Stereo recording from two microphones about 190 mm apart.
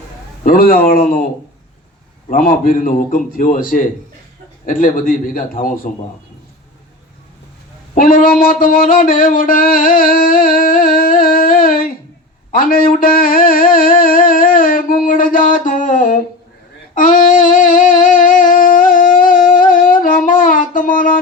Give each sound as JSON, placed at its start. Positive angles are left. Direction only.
{"t": 0.4, "sound": "a man's voice", "side_deg": 50}
{"t": 2.3, "sound": "a man's voice", "side_deg": 45}
{"t": 7.9, "sound": "a sound", "side_deg": 45}
{"t": 12.5, "sound": "music", "side_deg": 45}
{"t": 16.9, "sound": "humming", "side_deg": 45}
{"t": 18.5, "sound": "music", "side_deg": 45}